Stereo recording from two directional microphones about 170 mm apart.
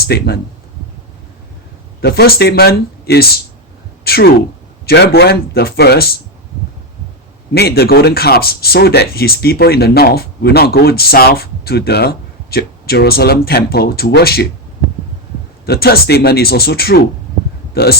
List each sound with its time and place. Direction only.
0.1 s a man's voice: 70° left (ahead or behind)
2.0 s a man's voice: 65° left (ahead or behind)
7.5 s speech: 70° left (ahead or behind)
15.6 s speech: 65° left (ahead or behind)